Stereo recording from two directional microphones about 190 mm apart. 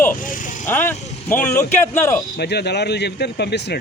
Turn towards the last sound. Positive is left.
turn(degrees=60)  # may be behind; listen again after turning